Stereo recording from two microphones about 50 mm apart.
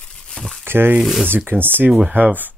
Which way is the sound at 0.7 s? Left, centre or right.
Right.